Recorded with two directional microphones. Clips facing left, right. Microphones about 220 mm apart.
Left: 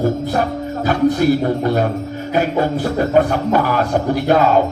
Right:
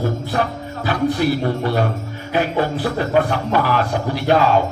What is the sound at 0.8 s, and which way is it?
Speech, 45° left (ahead or behind).